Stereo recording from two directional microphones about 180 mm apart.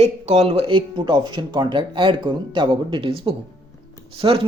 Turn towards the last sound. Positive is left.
turn(degrees=-35)  # may be behind; listen again after turning